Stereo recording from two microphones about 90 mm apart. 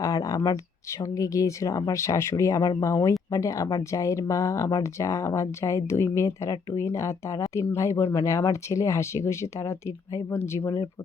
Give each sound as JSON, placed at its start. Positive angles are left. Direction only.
{"t": 0.0, "sound": "speech", "side_deg": 35}